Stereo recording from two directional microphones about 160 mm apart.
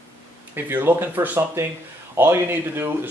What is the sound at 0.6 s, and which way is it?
Speech, 15° right (ahead or behind).